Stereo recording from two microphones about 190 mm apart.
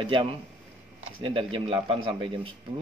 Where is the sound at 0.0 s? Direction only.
25° right (ahead or behind).